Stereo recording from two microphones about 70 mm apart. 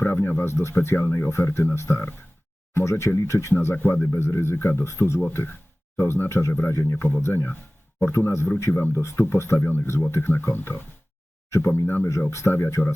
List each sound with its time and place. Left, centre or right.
0.0 s speech: left
3.6 s speech: left